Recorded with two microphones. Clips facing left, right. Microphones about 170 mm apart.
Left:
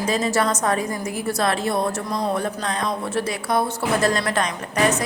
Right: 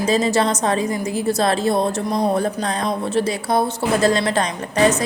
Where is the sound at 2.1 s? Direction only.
35° right (ahead or behind).